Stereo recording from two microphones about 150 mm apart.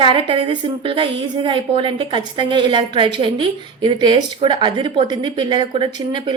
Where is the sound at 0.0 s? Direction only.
35° right (ahead or behind).